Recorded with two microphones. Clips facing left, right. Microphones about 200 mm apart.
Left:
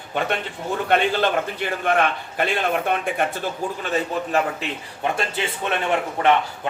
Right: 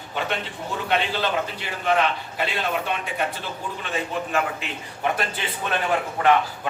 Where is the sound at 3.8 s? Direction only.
40° left (ahead or behind).